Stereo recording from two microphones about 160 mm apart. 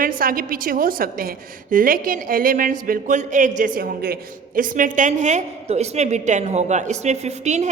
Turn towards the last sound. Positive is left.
turn(degrees=-45)  # may be behind; listen again after turning